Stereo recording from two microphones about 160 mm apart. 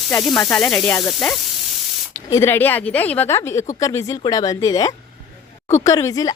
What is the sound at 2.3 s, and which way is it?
A woman's voice, 15° left (ahead or behind).